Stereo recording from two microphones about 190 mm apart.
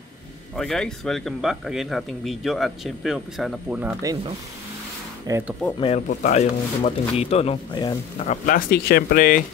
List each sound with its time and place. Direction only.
0.6 s speech: 5° left (ahead or behind)
5.3 s speech: 15° right (ahead or behind)
5.8 s speech: 35° left (ahead or behind)
8.5 s speech: 50° left (ahead or behind)